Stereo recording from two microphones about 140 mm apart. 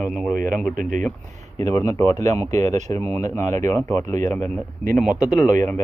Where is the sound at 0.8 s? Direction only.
70° right (ahead or behind).